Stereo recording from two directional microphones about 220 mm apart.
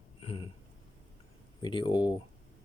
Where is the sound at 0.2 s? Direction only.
25° left (ahead or behind).